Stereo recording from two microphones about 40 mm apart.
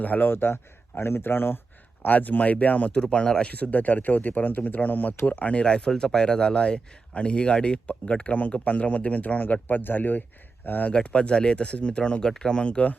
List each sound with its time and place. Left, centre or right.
0.2 s speech: left
2.0 s a man's voice: left
2.9 s speech: left
3.5 s a man's voice: left
8.4 s a man's voice: left
10.8 s speech: left